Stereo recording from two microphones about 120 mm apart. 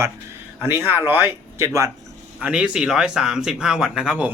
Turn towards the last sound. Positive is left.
turn(degrees=-10)  # may be behind; listen again after turning